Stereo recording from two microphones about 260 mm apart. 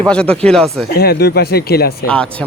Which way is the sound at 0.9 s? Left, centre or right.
Left.